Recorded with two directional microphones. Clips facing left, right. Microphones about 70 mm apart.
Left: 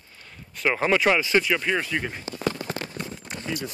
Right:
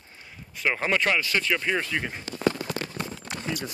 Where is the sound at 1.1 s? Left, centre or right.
Centre.